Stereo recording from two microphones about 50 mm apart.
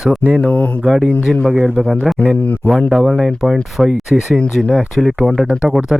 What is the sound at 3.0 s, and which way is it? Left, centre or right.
Speech, centre.